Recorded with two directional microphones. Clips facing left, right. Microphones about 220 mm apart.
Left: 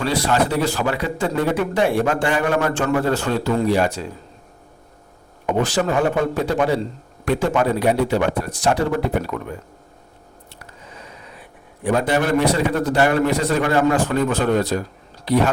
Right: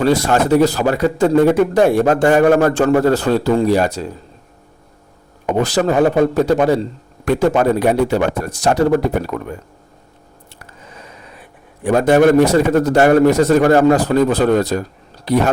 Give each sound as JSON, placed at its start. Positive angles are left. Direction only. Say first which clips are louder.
{"t": 0.0, "sound": "a man's voice", "louder": "right 5 dB", "side_deg": -45}
{"t": 5.5, "sound": "a man's voice", "louder": "right 5 dB", "side_deg": -40}
{"t": 11.9, "sound": "a man's voice", "louder": "right 8 dB", "side_deg": -45}